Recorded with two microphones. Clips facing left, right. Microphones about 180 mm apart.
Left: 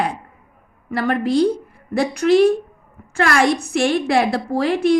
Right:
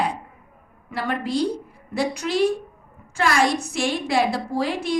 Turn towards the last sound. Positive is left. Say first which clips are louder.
# left 7 dB
turn(degrees=60)  # may be behind; listen again after turning